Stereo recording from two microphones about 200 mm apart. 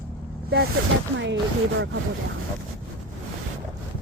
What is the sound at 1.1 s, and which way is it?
Speech, 65° right (ahead or behind).